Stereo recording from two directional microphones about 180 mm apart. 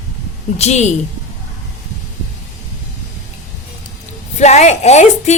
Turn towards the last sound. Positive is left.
turn(degrees=40)  # may be behind; listen again after turning